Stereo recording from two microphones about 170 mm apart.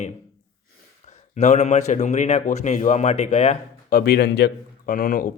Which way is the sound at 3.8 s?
65° left (ahead or behind).